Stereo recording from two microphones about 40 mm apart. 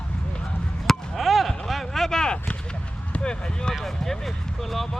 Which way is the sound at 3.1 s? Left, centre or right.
Left.